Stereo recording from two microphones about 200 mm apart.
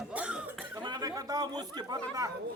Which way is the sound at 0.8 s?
20° right (ahead or behind).